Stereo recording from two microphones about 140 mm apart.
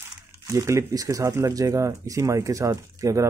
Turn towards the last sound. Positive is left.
turn(degrees=-25)  # may be behind; listen again after turning